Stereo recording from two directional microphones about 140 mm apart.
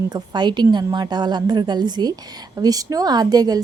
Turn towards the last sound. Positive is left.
turn(degrees=-25)  # may be behind; listen again after turning